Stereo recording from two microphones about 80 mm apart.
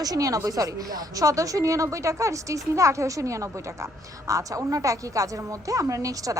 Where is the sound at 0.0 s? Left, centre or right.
Right.